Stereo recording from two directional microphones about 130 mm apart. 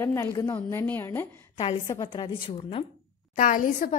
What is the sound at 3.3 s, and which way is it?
Speech, 90° left.